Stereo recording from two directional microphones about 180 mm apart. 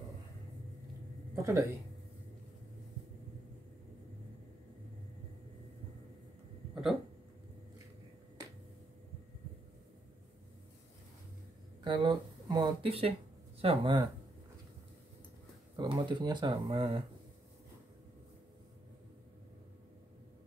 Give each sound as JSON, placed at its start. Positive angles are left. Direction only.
{"t": 1.3, "sound": "speech", "side_deg": -15}
{"t": 6.7, "sound": "a sound", "side_deg": 0}
{"t": 11.8, "sound": "speech", "side_deg": -25}
{"t": 15.7, "sound": "speech", "side_deg": -20}